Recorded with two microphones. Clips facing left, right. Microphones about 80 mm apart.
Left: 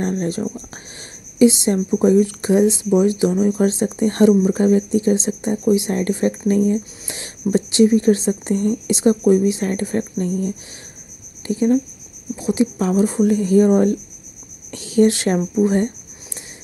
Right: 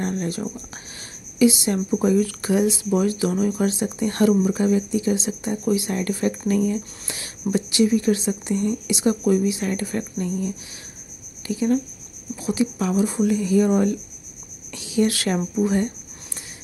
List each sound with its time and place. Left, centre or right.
0.0 s speech: left
1.4 s speech: left
14.7 s a sound: left
15.0 s speech: left